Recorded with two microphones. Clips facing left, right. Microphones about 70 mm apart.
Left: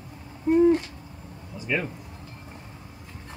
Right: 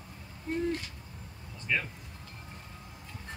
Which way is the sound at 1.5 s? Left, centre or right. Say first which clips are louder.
Left 4 dB; centre.